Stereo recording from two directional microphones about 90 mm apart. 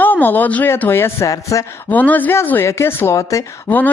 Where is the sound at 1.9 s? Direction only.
20° left (ahead or behind).